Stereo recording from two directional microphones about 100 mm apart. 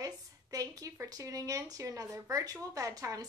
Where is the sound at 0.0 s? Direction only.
40° right (ahead or behind).